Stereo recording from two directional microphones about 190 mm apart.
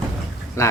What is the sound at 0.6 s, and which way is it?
Speech, 15° left (ahead or behind).